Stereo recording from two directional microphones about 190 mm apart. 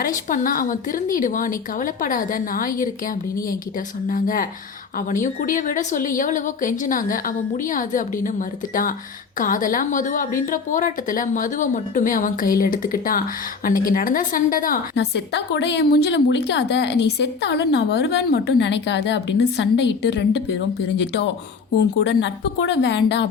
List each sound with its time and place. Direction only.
0.0 s a woman's voice: 45° left (ahead or behind)
14.9 s a woman's voice: 65° left (ahead or behind)